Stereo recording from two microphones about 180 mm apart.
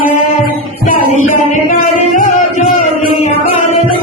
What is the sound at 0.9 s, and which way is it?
Music, 45° left (ahead or behind).